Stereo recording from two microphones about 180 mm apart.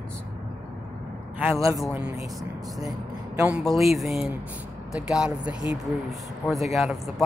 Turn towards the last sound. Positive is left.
turn(degrees=0)  # may be behind; listen again after turning